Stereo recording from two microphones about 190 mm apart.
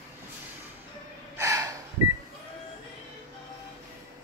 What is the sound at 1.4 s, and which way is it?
Gasp, 20° right (ahead or behind).